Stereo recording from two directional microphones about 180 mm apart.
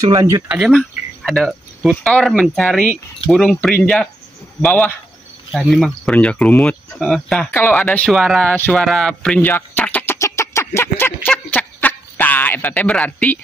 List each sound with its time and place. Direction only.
0.0 s speech: 20° right (ahead or behind)
0.5 s a man's voice: centre (ahead or behind)